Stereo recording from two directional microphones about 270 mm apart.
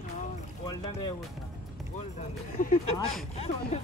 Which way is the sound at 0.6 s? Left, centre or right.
Centre.